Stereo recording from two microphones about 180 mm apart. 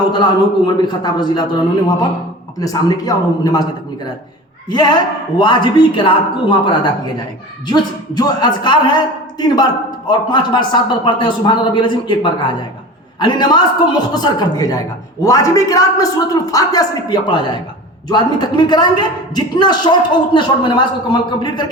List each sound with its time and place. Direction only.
0.1 s a man's voice: 25° left (ahead or behind)
2.6 s a man's voice: 20° left (ahead or behind)
4.7 s a man's voice: 25° left (ahead or behind)